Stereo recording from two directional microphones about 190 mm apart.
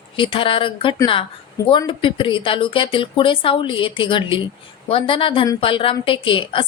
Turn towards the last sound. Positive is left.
turn(degrees=25)  # may be behind; listen again after turning